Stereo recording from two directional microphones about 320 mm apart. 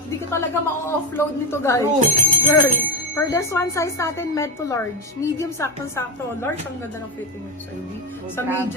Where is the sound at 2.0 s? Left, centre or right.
Right.